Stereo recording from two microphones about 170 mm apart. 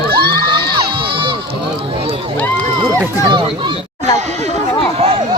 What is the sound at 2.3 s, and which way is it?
Speech, 10° left (ahead or behind).